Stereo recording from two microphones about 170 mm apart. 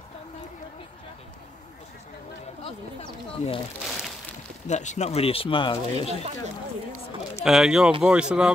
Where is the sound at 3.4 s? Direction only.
40° left (ahead or behind).